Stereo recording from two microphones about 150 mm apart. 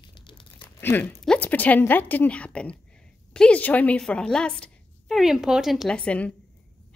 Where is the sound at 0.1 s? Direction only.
35° left (ahead or behind).